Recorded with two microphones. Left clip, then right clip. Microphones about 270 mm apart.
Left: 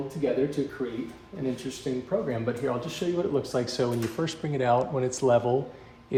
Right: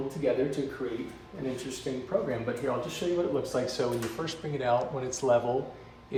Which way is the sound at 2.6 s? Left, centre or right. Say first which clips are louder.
Left 2 dB; left.